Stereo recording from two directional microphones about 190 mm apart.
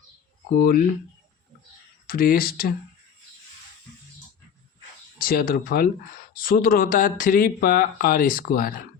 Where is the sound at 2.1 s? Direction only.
50° left (ahead or behind).